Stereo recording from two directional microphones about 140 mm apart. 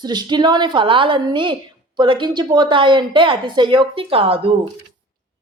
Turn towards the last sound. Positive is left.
turn(degrees=-45)  # may be behind; listen again after turning